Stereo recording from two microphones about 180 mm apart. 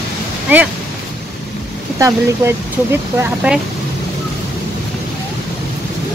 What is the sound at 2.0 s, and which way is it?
Speech, 15° right (ahead or behind).